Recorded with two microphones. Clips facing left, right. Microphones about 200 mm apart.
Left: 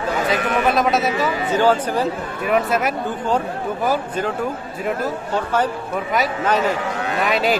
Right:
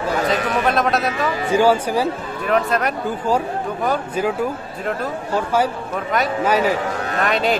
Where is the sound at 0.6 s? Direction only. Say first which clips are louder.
Left 2 dB; centre (ahead or behind).